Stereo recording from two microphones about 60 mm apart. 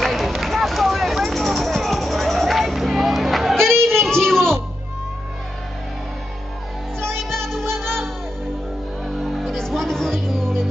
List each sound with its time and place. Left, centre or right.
0.0 s a sound: centre
7.2 s music: centre
9.2 s music: centre